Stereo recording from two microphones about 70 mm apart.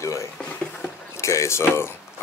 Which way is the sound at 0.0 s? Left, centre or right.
Left.